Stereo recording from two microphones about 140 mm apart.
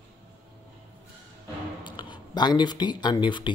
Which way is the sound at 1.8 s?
35° left (ahead or behind).